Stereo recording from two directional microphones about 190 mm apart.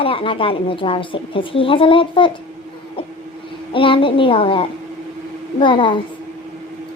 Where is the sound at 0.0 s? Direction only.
30° left (ahead or behind).